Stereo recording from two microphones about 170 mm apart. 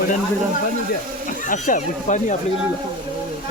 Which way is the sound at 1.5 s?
50° left (ahead or behind).